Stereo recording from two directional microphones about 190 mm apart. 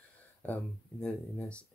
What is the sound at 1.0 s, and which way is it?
Speech, 5° left (ahead or behind).